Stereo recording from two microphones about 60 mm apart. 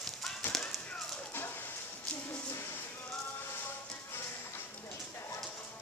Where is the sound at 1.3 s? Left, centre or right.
Left.